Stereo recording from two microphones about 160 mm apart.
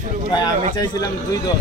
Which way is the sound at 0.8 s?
25° left (ahead or behind).